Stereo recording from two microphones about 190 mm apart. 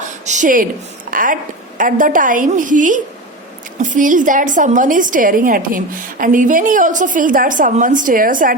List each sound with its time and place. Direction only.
0.1 s a woman's voice: 40° right (ahead or behind)